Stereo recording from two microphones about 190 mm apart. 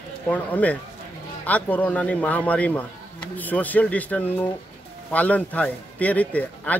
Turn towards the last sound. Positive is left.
turn(degrees=10)  # may be behind; listen again after turning